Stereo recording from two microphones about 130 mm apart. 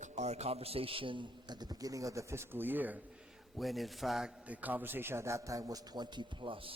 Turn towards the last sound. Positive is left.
turn(degrees=-45)  # may be behind; listen again after turning